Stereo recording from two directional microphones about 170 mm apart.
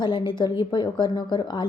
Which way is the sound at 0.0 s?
25° left (ahead or behind).